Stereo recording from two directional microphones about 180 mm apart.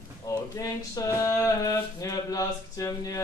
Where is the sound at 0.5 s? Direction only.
20° left (ahead or behind).